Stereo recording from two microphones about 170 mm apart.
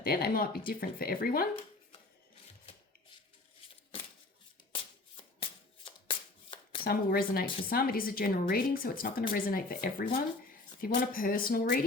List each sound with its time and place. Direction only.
0.0 s speech: 60° left (ahead or behind)
4.7 s shuffling cards: 30° left (ahead or behind)
6.8 s speech: 60° left (ahead or behind)